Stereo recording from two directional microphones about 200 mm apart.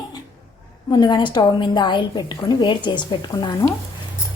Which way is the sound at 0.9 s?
20° left (ahead or behind).